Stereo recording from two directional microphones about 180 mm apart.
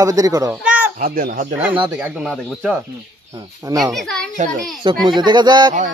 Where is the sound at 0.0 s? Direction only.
20° right (ahead or behind).